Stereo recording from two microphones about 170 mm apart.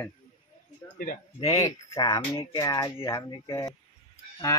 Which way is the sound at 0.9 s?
55° left (ahead or behind).